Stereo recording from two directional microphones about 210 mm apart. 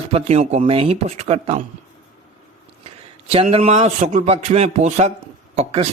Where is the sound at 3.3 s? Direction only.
30° right (ahead or behind).